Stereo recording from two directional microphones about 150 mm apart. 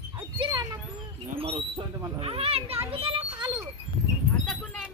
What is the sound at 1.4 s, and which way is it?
A child's voice, 40° right (ahead or behind).